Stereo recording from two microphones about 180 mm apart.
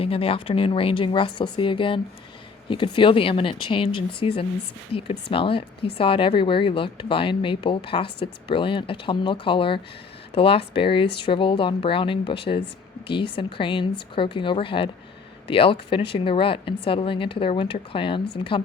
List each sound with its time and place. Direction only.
0.0 s speech: 30° left (ahead or behind)